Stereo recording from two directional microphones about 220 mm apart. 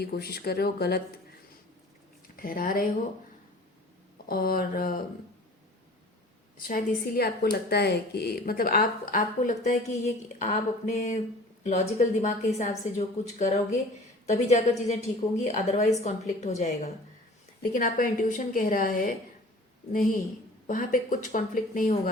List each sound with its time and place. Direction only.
0.0 s speech: 45° left (ahead or behind)
2.3 s speech: 40° left (ahead or behind)
4.3 s a woman's voice: 40° left (ahead or behind)
6.6 s a woman's voice: 40° left (ahead or behind)